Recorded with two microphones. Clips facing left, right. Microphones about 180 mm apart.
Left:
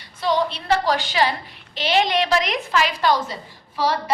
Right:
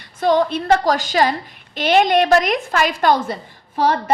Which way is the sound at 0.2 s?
50° right (ahead or behind).